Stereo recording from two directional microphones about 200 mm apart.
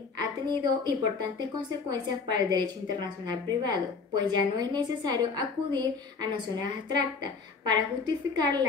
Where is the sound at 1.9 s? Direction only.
20° right (ahead or behind).